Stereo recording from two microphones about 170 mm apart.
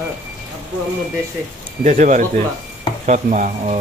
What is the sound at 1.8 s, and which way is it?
Speech, 50° right (ahead or behind).